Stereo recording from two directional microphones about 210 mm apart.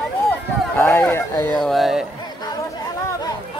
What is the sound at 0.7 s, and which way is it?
Speech, 10° left (ahead or behind).